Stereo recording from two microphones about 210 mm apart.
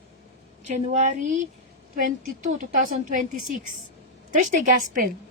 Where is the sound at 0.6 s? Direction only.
35° right (ahead or behind).